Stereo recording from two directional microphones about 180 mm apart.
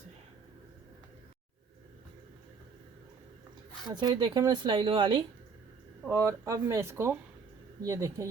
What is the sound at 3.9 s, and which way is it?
Speech, 25° right (ahead or behind).